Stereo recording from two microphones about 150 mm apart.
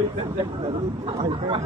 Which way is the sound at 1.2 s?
35° right (ahead or behind).